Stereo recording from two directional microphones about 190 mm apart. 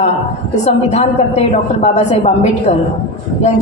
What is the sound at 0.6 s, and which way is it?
A woman's voice, 35° left (ahead or behind).